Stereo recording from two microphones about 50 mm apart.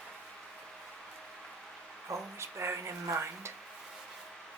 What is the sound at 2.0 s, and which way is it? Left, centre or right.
Speech, right.